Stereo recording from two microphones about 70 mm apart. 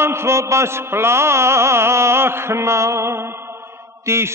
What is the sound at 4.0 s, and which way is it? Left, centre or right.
Mantra, right.